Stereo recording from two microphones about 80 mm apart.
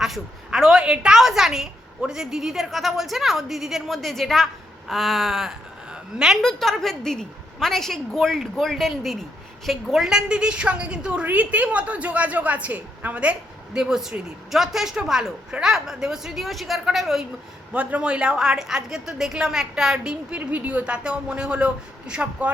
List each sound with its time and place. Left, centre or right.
0.0 s a woman's voice: centre
6.4 s a woman's voice: centre
13.7 s a woman's voice: centre
17.7 s a woman's voice: centre